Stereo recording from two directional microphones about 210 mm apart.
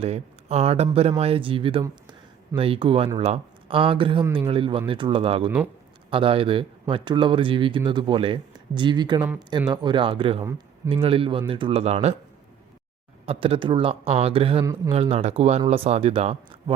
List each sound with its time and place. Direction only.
0.0 s a man's voice: 30° right (ahead or behind)
13.2 s speech: 25° right (ahead or behind)
14.6 s a man's voice: 15° right (ahead or behind)
14.9 s speech: 30° right (ahead or behind)